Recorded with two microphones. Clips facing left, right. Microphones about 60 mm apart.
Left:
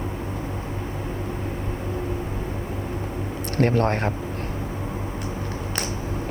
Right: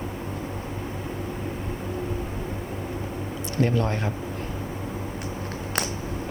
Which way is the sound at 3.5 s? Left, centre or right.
Left.